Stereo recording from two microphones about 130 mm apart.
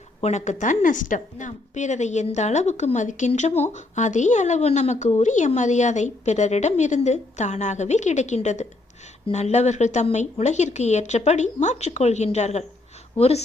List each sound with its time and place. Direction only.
0.2 s a woman's voice: 60° left (ahead or behind)